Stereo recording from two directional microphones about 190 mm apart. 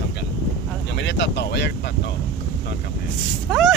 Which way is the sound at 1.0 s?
65° left (ahead or behind).